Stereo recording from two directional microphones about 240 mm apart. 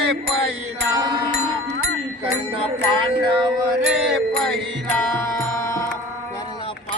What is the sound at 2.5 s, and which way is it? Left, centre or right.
Music, right.